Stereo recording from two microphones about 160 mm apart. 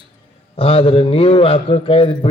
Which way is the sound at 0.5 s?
35° left (ahead or behind).